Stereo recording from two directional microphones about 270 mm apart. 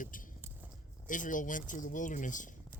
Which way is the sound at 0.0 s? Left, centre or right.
Left.